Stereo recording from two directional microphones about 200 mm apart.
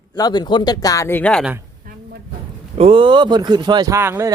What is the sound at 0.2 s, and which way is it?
Speech, 20° left (ahead or behind).